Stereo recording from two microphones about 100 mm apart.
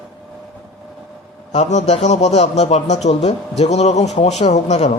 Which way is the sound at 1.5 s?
90° left.